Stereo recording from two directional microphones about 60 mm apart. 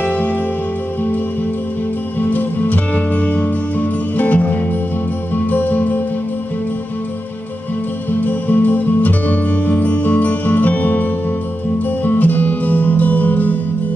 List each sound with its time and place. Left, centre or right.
0.0 s music: left
2.1 s music: left
8.2 s music: left